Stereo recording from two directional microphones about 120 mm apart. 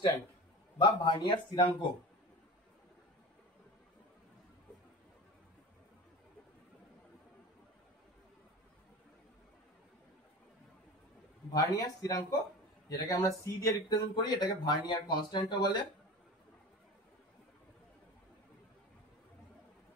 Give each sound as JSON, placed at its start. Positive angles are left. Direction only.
{"t": 0.7, "sound": "speech", "side_deg": 40}
{"t": 11.5, "sound": "speech", "side_deg": 30}